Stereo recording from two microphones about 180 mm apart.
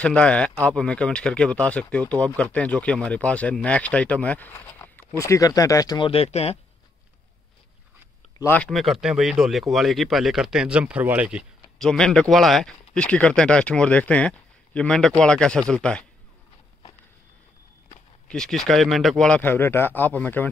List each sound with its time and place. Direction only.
0.0 s speech: 5° left (ahead or behind); by 6.6 s 35° left (ahead or behind)
8.4 s speech: 10° left (ahead or behind)
8.6 s speech: centre (ahead or behind)
18.3 s speech: 5° left (ahead or behind)